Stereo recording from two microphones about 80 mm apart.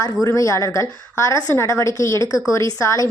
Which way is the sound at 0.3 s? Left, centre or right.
Left.